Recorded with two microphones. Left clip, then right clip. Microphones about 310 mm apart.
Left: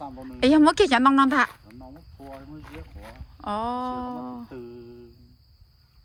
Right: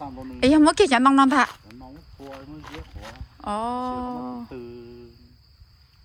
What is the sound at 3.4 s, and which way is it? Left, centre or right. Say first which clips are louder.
Speech: right 1 dB; centre.